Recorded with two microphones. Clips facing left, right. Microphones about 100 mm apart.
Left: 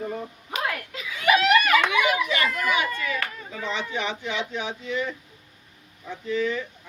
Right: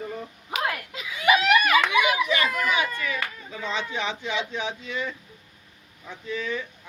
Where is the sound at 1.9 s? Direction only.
20° right (ahead or behind).